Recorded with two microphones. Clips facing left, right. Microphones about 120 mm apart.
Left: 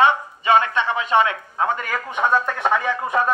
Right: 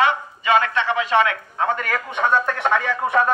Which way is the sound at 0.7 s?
20° left (ahead or behind).